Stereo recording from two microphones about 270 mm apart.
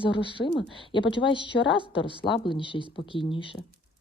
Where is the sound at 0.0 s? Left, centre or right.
Centre.